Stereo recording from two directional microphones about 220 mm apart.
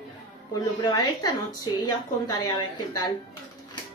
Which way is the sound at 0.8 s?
15° left (ahead or behind).